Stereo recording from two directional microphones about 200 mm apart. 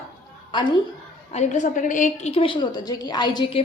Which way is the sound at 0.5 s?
25° left (ahead or behind).